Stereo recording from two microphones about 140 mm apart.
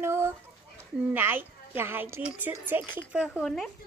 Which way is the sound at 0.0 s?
20° right (ahead or behind).